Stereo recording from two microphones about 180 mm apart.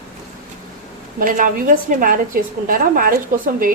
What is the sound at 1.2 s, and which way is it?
A woman's voice, 50° right (ahead or behind).